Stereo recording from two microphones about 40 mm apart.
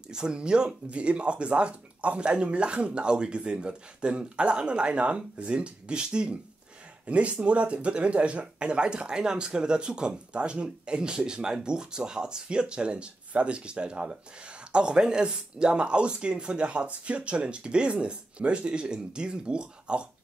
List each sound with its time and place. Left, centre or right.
0.1 s speech: centre
7.1 s speech: right